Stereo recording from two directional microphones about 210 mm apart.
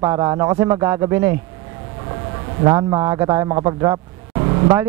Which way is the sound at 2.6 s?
20° right (ahead or behind).